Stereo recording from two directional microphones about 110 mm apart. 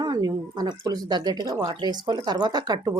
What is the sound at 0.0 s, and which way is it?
Speech, 40° right (ahead or behind).